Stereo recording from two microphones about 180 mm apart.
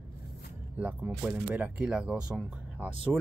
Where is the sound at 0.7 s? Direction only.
10° right (ahead or behind).